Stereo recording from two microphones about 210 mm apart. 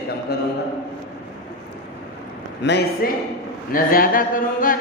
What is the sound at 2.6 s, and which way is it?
A woman's voice, 50° left (ahead or behind).